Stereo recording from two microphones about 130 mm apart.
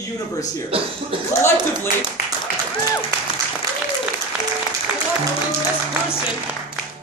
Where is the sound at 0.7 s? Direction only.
45° right (ahead or behind).